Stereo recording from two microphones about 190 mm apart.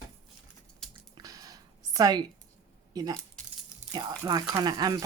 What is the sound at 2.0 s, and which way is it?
Speech, 20° right (ahead or behind).